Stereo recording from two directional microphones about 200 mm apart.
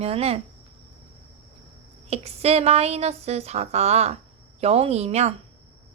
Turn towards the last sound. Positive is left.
turn(degrees=-30)  # may be behind; listen again after turning